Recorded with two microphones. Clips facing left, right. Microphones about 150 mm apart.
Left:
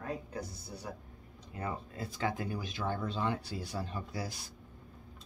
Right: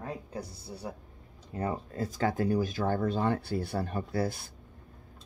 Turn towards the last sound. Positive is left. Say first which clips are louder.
# right 9 dB
turn(degrees=-55)  # may be behind; listen again after turning